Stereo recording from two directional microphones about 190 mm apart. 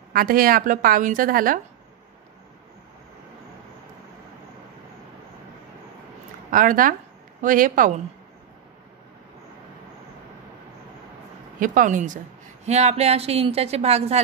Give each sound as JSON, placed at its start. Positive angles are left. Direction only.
{"t": 0.1, "sound": "a woman's voice", "side_deg": -50}
{"t": 6.5, "sound": "a woman's voice", "side_deg": -45}
{"t": 11.6, "sound": "a woman's voice", "side_deg": -45}